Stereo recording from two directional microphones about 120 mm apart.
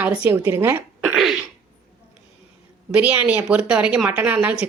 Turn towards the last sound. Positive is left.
turn(degrees=-10)  # may be behind; listen again after turning